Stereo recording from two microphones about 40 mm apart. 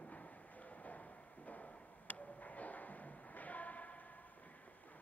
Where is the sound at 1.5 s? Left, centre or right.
Left.